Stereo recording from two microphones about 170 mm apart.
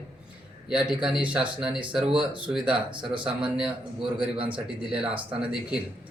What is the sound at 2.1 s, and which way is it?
Speech, 30° right (ahead or behind).